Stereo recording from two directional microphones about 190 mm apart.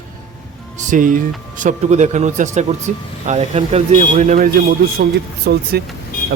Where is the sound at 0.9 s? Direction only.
45° right (ahead or behind).